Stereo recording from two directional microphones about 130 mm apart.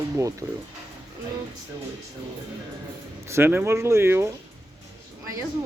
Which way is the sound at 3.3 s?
20° right (ahead or behind).